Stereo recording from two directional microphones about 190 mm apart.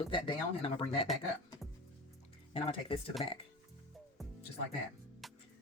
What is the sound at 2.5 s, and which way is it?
Speech, 30° left (ahead or behind).